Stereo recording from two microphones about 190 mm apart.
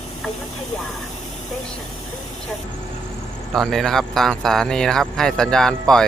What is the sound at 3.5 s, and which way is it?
Speech, centre (ahead or behind).